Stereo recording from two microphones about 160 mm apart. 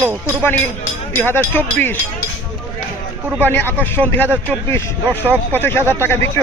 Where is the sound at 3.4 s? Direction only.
10° left (ahead or behind).